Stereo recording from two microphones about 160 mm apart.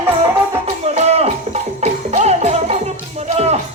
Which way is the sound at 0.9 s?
40° right (ahead or behind).